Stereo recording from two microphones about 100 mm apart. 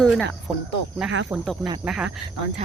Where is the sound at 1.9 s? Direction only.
10° right (ahead or behind).